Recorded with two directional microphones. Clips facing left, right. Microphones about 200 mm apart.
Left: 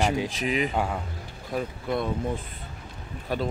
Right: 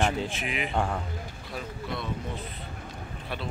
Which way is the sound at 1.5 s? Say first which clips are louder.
Left 7 dB; 50° left (ahead or behind).